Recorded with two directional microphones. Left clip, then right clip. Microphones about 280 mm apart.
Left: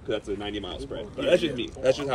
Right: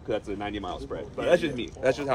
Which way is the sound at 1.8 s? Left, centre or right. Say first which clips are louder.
Left 1 dB; right.